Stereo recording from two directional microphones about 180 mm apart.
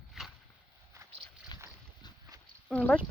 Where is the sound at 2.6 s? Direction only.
5° left (ahead or behind).